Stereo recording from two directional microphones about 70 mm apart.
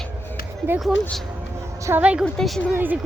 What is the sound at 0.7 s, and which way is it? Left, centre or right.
Speech, right.